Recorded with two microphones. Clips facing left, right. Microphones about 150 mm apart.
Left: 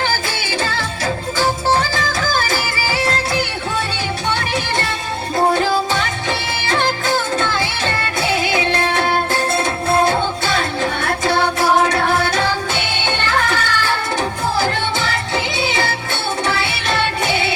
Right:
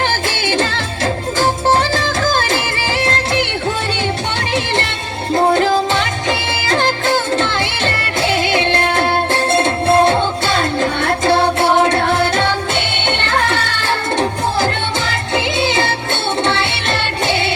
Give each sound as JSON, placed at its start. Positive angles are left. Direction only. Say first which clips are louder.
{"t": 1.6, "sound": "music", "louder": "right 3 dB", "side_deg": -30}
{"t": 6.7, "sound": "music", "louder": "right 2 dB", "side_deg": -30}
{"t": 9.0, "sound": "music", "louder": "right 2 dB", "side_deg": -25}
{"t": 16.4, "sound": "music", "louder": "right 3 dB", "side_deg": -25}